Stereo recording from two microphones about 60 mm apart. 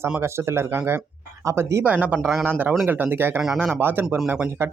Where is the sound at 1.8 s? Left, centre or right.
Right.